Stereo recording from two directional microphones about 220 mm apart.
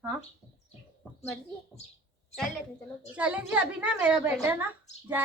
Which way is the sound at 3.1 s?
5° right (ahead or behind).